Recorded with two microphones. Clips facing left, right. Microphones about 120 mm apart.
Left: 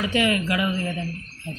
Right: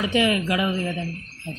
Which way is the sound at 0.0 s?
20° right (ahead or behind).